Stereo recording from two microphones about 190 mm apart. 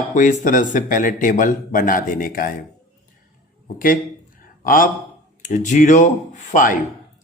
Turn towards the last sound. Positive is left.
turn(degrees=45)  # may be behind; listen again after turning